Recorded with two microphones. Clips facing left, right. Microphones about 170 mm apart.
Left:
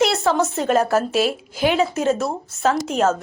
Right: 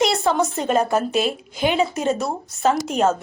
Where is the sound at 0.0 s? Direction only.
Centre (ahead or behind).